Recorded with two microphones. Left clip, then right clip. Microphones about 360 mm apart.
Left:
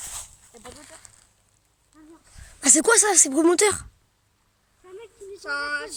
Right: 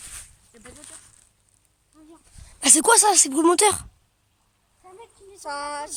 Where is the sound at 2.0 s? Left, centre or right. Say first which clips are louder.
Left 1 dB; centre.